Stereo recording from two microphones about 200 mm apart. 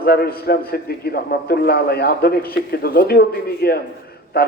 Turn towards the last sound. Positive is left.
turn(degrees=50)  # may be behind; listen again after turning